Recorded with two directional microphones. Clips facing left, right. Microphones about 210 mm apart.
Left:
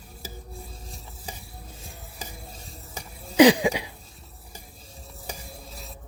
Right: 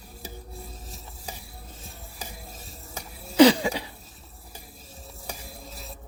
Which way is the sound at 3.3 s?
15° left (ahead or behind).